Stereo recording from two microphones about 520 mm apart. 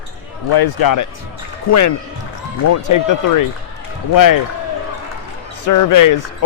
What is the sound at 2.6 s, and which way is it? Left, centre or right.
Speech, left.